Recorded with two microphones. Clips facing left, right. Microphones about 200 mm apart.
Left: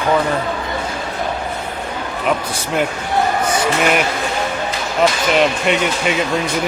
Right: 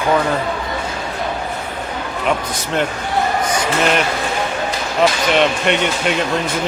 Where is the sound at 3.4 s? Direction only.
10° left (ahead or behind).